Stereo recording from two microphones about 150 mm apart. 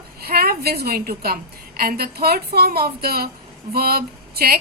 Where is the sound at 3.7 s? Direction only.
90° right.